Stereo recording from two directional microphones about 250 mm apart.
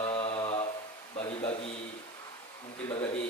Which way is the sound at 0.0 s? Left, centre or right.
Left.